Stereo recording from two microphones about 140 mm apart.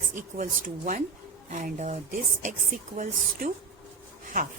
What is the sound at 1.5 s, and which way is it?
A woman's voice, 65° right (ahead or behind).